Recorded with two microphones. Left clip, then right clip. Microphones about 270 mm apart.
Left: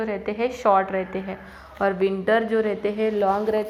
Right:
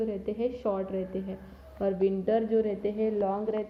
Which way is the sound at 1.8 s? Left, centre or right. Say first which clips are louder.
Left 6 dB; centre.